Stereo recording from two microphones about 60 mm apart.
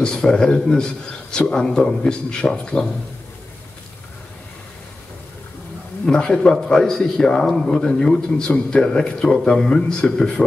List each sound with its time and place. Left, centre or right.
0.0 s a man's voice: centre
6.0 s a man's voice: centre